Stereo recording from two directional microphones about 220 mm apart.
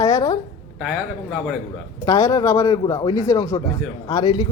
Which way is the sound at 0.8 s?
Centre (ahead or behind).